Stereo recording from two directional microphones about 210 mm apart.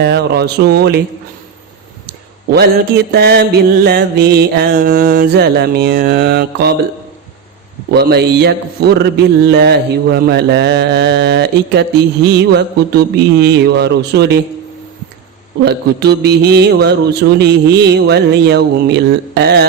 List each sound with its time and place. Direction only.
0.0 s mantra: 55° right (ahead or behind)
3.1 s mantra: 50° right (ahead or behind)
7.9 s mantra: 50° right (ahead or behind)
15.6 s mantra: 50° right (ahead or behind)